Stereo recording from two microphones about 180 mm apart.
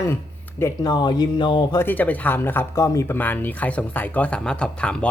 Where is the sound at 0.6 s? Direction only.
25° left (ahead or behind).